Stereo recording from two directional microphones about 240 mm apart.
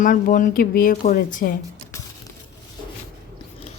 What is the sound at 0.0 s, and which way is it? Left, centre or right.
Speech, left.